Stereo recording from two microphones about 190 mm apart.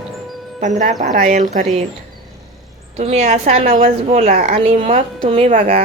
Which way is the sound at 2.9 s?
35° right (ahead or behind).